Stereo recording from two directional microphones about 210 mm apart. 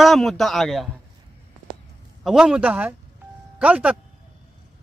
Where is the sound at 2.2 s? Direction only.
Centre (ahead or behind).